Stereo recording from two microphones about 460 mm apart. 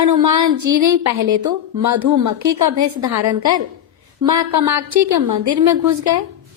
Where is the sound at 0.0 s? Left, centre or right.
Right.